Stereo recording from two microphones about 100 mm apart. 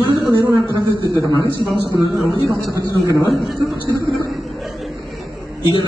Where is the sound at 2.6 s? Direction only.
35° right (ahead or behind).